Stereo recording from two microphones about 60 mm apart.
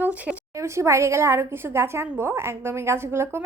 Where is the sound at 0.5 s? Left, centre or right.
Right.